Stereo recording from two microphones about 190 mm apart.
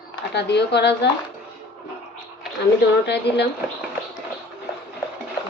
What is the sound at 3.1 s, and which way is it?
Speech, 60° left (ahead or behind).